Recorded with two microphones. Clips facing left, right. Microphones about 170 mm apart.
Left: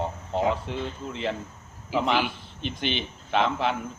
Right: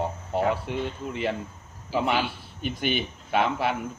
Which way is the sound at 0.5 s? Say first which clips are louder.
Right 1 dB; 5° right (ahead or behind).